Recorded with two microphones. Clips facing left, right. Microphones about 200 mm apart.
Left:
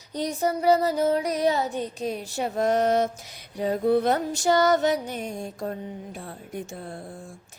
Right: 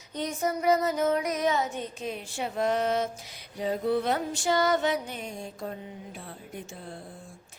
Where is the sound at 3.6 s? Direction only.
50° left (ahead or behind).